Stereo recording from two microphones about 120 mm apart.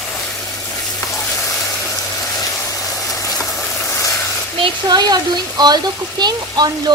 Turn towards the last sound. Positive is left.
turn(degrees=-35)  # may be behind; listen again after turning